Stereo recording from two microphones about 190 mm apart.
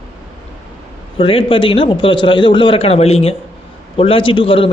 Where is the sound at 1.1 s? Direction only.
30° left (ahead or behind).